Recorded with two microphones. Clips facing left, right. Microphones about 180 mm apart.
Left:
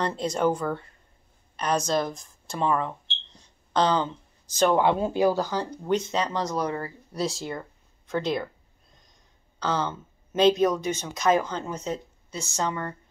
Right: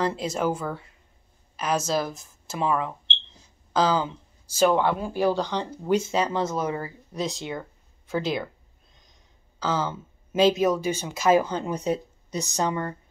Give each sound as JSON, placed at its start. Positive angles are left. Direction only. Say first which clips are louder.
{"t": 0.0, "sound": "speech", "louder": "left 1 dB", "side_deg": -5}
{"t": 4.8, "sound": "speech", "louder": "left 3 dB", "side_deg": 20}
{"t": 5.2, "sound": "speech", "louder": "right 1 dB", "side_deg": 5}
{"t": 9.6, "sound": "speech", "louder": "right 1 dB", "side_deg": -5}